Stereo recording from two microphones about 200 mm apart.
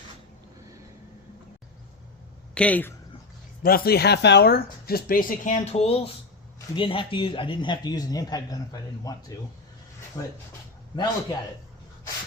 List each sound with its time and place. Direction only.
2.6 s speech: 5° left (ahead or behind)
3.6 s a man's voice: 45° left (ahead or behind); by 9.1 s 20° left (ahead or behind)
10.2 s a man's voice: 20° left (ahead or behind)